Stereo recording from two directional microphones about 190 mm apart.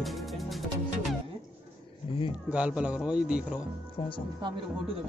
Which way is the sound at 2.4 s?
5° right (ahead or behind).